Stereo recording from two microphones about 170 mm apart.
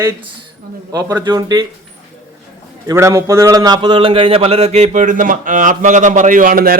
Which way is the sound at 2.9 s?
15° right (ahead or behind).